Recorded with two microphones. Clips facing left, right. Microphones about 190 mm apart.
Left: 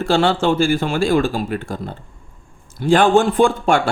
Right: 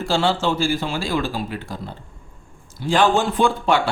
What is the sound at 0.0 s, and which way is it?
Speech, 60° left (ahead or behind).